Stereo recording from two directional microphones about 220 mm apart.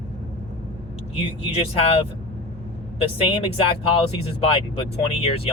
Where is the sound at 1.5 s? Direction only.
25° left (ahead or behind).